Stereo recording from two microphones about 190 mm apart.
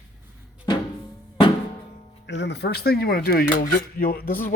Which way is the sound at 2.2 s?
65° left (ahead or behind).